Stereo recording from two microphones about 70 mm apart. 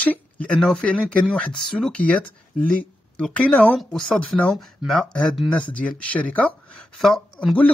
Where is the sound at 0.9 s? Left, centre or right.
Left.